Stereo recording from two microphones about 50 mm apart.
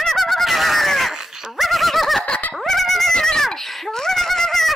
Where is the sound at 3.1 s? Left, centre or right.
Centre.